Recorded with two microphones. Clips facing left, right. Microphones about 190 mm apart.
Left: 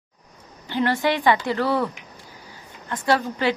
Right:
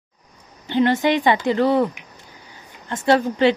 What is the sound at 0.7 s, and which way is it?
A woman's voice, 20° right (ahead or behind).